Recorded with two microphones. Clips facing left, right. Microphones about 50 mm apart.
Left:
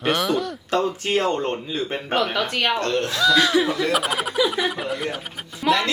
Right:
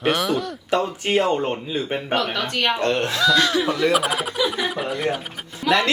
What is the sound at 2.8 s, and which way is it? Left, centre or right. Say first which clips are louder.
Speech: right 2 dB; right.